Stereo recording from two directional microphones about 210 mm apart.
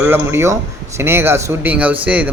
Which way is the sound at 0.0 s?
10° right (ahead or behind).